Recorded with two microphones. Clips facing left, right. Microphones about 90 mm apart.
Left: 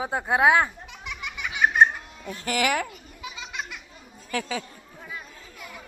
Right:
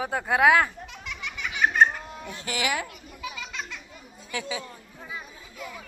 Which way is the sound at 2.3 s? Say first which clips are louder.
Left 4 dB; 45° left (ahead or behind).